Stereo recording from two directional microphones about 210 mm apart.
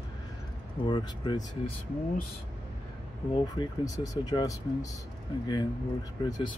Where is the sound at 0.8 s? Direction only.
20° left (ahead or behind).